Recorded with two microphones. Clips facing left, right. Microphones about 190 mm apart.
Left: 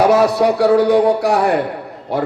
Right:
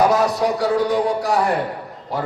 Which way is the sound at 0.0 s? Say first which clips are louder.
Left 5 dB; 70° left (ahead or behind).